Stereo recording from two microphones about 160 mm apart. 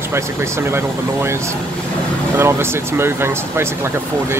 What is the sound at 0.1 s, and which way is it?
Speech, 15° right (ahead or behind).